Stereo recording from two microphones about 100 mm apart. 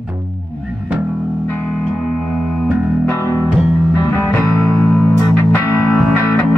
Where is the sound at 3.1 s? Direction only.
30° left (ahead or behind).